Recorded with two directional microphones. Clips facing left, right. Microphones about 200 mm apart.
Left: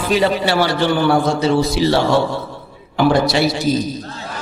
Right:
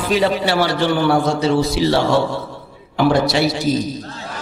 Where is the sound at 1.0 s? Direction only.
30° left (ahead or behind).